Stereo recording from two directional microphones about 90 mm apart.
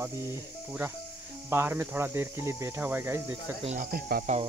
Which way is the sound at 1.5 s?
25° right (ahead or behind).